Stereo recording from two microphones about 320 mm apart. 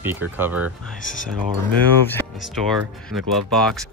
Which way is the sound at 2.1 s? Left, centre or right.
Centre.